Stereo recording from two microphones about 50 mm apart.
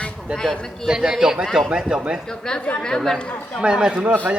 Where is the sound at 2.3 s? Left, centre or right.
Centre.